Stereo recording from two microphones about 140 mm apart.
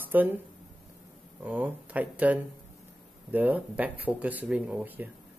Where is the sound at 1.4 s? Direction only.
10° right (ahead or behind).